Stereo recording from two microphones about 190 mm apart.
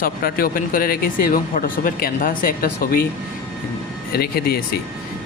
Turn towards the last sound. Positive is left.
turn(degrees=55)  # may be behind; listen again after turning